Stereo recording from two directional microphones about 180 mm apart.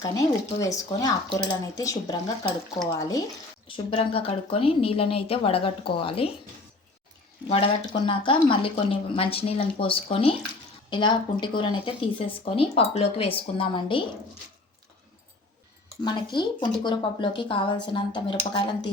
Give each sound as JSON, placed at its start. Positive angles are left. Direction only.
{"t": 0.0, "sound": "speech", "side_deg": 20}
{"t": 3.7, "sound": "a woman's voice", "side_deg": 30}
{"t": 7.4, "sound": "a woman's voice", "side_deg": 35}
{"t": 16.0, "sound": "speech", "side_deg": 25}